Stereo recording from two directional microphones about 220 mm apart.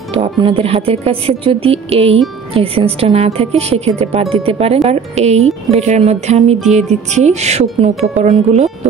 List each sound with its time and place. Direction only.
0.1 s speech: 25° right (ahead or behind)